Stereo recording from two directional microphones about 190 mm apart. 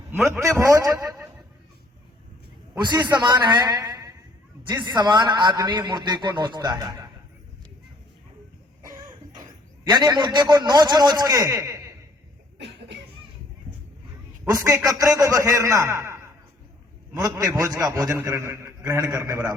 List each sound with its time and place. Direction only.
0.1 s a man's voice: 15° right (ahead or behind)
2.8 s a man's voice: 25° right (ahead or behind)
9.9 s a man's voice: 20° right (ahead or behind)
12.5 s cough: 65° right (ahead or behind)
14.4 s a man's voice: 15° right (ahead or behind)